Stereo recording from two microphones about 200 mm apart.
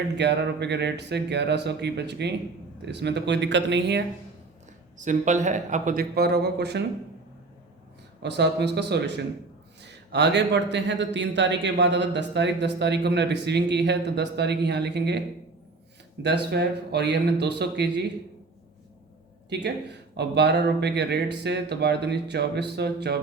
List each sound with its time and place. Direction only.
0.2 s a man's voice: 60° right (ahead or behind)
4.9 s speech: 40° right (ahead or behind); by 6.8 s 55° right (ahead or behind)
8.2 s a man's voice: 55° right (ahead or behind)
16.2 s a man's voice: 55° right (ahead or behind)
19.6 s a man's voice: 55° right (ahead or behind)